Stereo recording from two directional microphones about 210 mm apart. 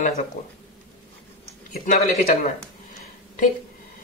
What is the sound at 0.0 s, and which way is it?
Speech, 35° left (ahead or behind).